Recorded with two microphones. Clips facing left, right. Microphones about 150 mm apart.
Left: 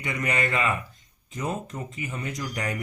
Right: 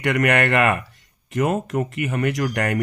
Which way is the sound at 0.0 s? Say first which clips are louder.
Right 9 dB; 75° right (ahead or behind).